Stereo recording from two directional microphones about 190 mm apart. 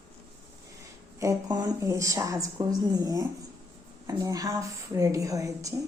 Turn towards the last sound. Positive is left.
turn(degrees=-15)  # may be behind; listen again after turning